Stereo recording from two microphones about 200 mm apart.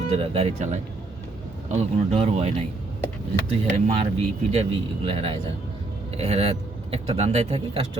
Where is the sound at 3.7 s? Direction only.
30° right (ahead or behind).